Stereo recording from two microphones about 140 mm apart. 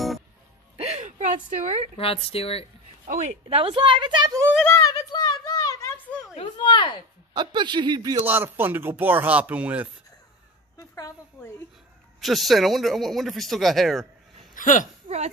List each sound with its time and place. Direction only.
0.7 s a sound: 50° right (ahead or behind)
2.0 s speech: 45° left (ahead or behind)
3.4 s a woman's voice: 40° right (ahead or behind)
4.6 s a sound: 20° left (ahead or behind)
6.3 s speech: 35° left (ahead or behind)
7.3 s a woman's voice: 35° right (ahead or behind)
8.3 s speech: 15° right (ahead or behind)
10.8 s speech: 20° left (ahead or behind)
12.2 s speech: centre (ahead or behind)
14.5 s a sound: 70° left (ahead or behind)